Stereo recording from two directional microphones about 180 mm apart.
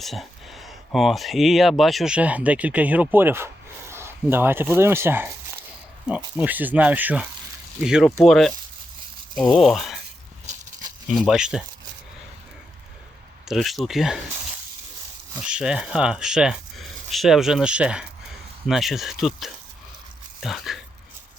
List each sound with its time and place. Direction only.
0.0 s speech: centre (ahead or behind)
10.4 s a sound: 40° right (ahead or behind)
11.1 s speech: 5° right (ahead or behind)
13.5 s speech: centre (ahead or behind)
15.4 s speech: 5° right (ahead or behind)